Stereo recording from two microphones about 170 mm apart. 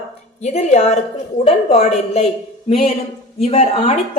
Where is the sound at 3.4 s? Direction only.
40° left (ahead or behind).